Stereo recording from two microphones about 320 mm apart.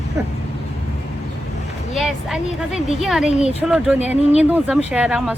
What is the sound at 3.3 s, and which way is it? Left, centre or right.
Speech, centre.